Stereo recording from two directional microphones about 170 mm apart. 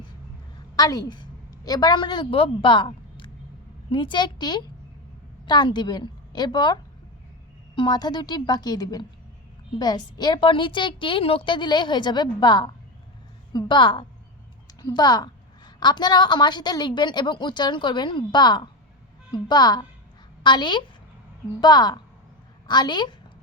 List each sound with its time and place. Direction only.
0.8 s a woman's voice: 20° left (ahead or behind)
7.8 s a woman's voice: 25° left (ahead or behind)